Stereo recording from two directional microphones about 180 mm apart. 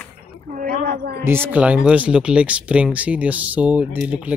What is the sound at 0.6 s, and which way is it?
Speech, 60° right (ahead or behind).